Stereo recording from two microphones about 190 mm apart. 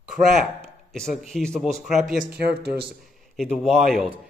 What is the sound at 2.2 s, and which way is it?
Speech, 55° right (ahead or behind).